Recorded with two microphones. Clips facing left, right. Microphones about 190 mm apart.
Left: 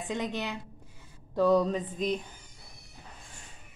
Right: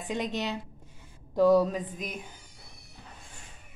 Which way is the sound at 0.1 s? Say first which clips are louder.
Right 2 dB; 15° right (ahead or behind).